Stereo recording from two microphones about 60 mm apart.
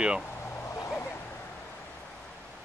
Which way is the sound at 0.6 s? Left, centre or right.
Left.